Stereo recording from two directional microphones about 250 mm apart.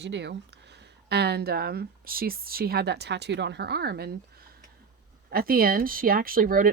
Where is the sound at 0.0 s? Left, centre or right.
Right.